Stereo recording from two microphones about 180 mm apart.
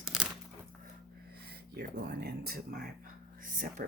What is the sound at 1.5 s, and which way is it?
Speech, 60° right (ahead or behind).